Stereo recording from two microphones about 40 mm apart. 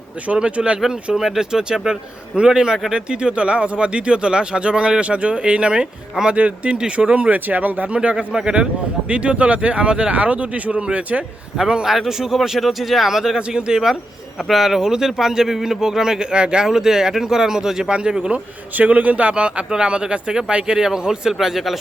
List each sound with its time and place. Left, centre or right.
0.3 s speech: right
1.1 s a man's voice: centre; by 7.3 s right
7.3 s speech: right
7.9 s speech: right
11.9 s a man's voice: centre
14.4 s a man's voice: centre
16.3 s speech: right
16.6 s a man's voice: centre
17.8 s speech: right
18.8 s speech: right; by 21.3 s centre
21.3 s speech: centre